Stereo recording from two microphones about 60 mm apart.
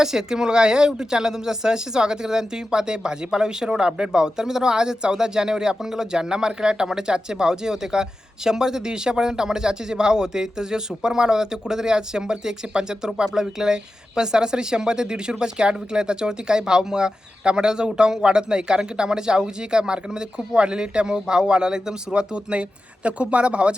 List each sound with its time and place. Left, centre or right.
0.0 s a man's voice: centre